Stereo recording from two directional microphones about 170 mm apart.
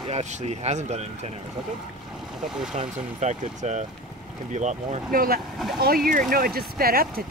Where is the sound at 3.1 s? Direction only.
45° right (ahead or behind).